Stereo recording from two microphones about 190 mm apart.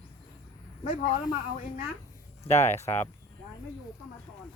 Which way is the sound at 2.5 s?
35° left (ahead or behind).